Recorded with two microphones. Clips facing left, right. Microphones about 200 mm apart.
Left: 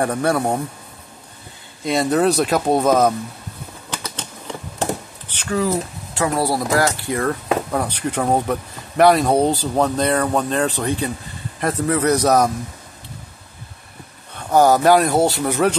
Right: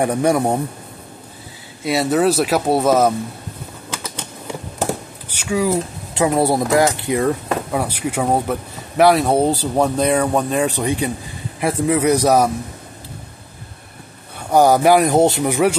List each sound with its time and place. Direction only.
0.0 s speech: 15° right (ahead or behind)
1.9 s speech: 5° right (ahead or behind)
5.3 s speech: 10° right (ahead or behind)
14.5 s speech: 15° right (ahead or behind)